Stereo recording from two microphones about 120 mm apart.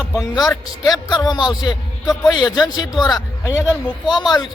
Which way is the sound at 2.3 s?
35° left (ahead or behind).